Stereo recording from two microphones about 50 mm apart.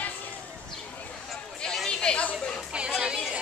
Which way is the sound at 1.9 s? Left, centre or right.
Centre.